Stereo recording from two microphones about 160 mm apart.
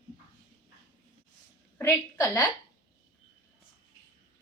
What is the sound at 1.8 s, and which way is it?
Speech, 20° left (ahead or behind).